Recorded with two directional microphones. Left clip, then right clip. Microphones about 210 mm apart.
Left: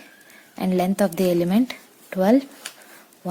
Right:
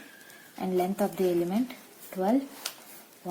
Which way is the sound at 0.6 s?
45° left (ahead or behind).